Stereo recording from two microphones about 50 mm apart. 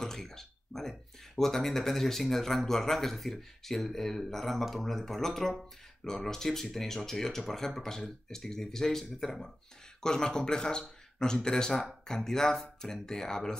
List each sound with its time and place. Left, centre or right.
0.0 s a man's voice: centre